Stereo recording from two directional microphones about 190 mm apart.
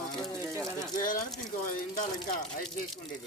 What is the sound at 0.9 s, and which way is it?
Speech, 45° left (ahead or behind).